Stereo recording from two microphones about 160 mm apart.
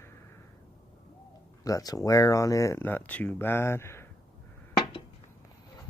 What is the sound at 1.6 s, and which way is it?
Speech, 25° left (ahead or behind).